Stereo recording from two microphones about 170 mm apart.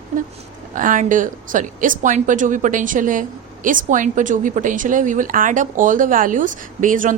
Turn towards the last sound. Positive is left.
turn(degrees=-50)  # may be behind; listen again after turning